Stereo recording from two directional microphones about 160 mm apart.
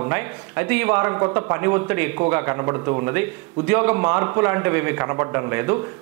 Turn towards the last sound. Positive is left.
turn(degrees=-10)  # may be behind; listen again after turning